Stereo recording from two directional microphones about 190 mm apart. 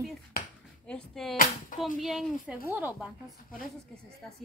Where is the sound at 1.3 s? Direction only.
45° left (ahead or behind).